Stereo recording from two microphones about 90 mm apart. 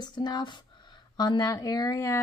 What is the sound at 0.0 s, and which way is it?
Speech, 55° left (ahead or behind).